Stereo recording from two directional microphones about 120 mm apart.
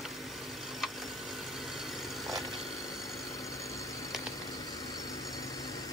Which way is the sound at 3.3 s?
25° left (ahead or behind).